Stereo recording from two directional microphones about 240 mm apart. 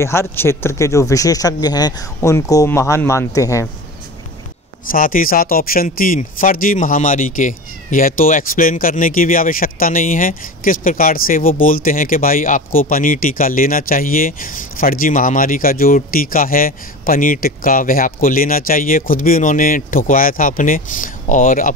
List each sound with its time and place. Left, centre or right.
0.0 s speech: centre
4.9 s speech: left